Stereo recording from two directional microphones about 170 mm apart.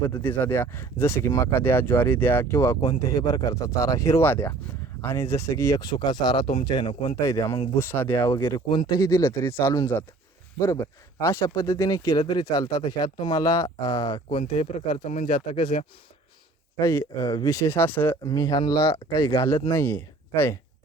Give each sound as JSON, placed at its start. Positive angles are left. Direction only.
{"t": 0.2, "sound": "speech", "side_deg": 10}
{"t": 11.2, "sound": "speech", "side_deg": 15}
{"t": 15.3, "sound": "speech", "side_deg": 30}
{"t": 16.7, "sound": "speech", "side_deg": 15}
{"t": 18.2, "sound": "speech", "side_deg": 20}